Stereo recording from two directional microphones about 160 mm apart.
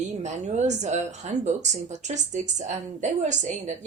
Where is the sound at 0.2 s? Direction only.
45° right (ahead or behind).